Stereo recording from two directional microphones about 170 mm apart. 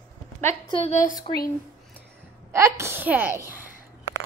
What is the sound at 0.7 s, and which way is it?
Speech, 40° left (ahead or behind).